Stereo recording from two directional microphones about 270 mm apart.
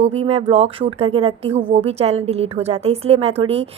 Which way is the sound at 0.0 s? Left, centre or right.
Right.